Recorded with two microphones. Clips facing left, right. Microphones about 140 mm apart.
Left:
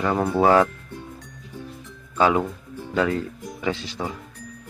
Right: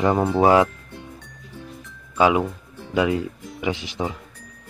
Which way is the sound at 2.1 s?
10° right (ahead or behind).